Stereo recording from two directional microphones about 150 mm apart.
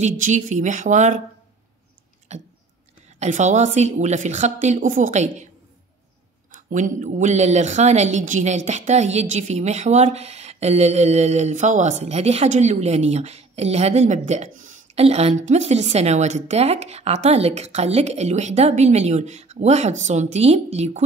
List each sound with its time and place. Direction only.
0.0 s speech: 60° right (ahead or behind)
2.3 s a sound: 50° right (ahead or behind)
3.2 s a woman's voice: 55° right (ahead or behind)
6.7 s a woman's voice: 55° right (ahead or behind)